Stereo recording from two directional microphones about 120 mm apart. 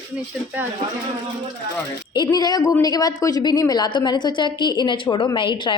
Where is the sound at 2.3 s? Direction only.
35° left (ahead or behind).